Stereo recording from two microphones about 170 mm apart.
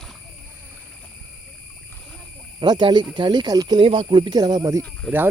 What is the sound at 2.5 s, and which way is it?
Speech, 25° right (ahead or behind).